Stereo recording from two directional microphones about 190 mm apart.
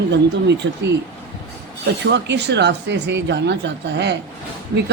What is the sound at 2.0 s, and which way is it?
Speech, 65° right (ahead or behind).